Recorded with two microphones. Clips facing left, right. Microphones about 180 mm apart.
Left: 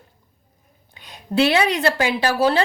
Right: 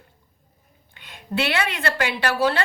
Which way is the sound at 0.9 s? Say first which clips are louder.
Left 6 dB; 40° left (ahead or behind).